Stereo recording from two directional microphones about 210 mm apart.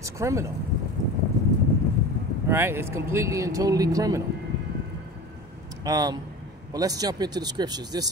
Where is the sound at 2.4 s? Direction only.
10° right (ahead or behind).